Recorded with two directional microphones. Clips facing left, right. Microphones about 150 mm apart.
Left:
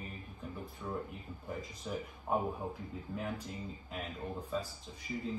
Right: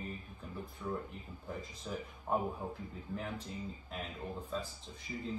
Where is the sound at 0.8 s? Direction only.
10° left (ahead or behind).